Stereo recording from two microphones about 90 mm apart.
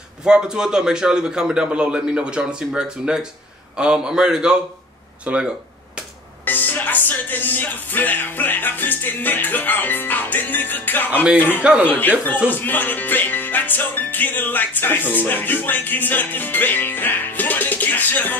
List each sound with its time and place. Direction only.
0.2 s a man's voice: 10° right (ahead or behind)
6.4 s music: 20° left (ahead or behind)